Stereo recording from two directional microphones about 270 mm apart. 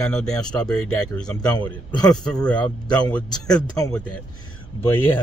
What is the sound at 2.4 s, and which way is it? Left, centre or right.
Speech, centre.